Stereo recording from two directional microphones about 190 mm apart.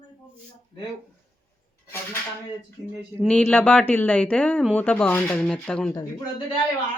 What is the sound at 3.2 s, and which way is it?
Speech, 5° left (ahead or behind).